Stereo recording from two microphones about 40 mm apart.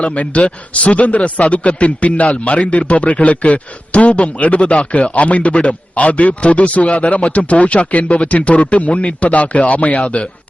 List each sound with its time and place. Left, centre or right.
0.0 s speech: left